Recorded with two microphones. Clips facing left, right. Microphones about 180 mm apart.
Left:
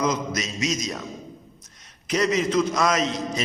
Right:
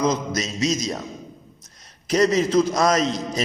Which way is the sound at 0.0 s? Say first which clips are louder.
Right 2 dB; 30° right (ahead or behind).